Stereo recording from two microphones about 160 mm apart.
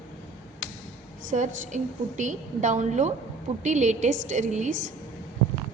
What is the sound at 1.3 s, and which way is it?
A woman's voice, 50° right (ahead or behind).